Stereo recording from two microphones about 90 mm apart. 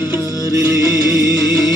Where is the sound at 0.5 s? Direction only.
30° right (ahead or behind).